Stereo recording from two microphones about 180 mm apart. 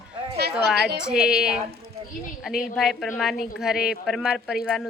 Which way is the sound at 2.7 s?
Centre (ahead or behind).